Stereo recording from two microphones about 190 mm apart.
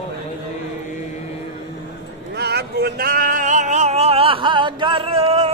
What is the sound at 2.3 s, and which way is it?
Music, 60° right (ahead or behind).